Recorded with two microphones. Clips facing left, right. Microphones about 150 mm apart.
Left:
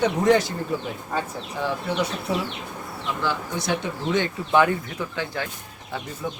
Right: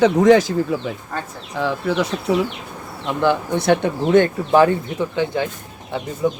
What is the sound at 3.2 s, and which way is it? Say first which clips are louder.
Speech: right 10 dB; 60° right (ahead or behind).